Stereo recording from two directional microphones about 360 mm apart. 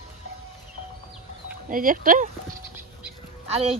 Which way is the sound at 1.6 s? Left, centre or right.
Right.